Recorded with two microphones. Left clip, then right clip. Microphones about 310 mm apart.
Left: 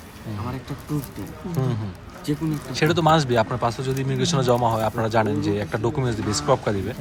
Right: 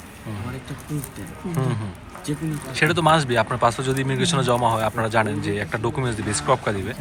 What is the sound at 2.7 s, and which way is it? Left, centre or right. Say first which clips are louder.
Speech: right 1 dB; centre.